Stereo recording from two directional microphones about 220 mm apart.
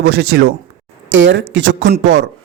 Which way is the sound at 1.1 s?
60° right (ahead or behind).